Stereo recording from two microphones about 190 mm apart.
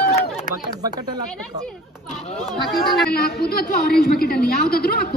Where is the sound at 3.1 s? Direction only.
55° left (ahead or behind).